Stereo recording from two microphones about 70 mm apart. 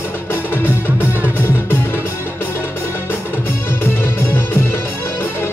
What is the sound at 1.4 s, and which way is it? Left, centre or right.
Music, left.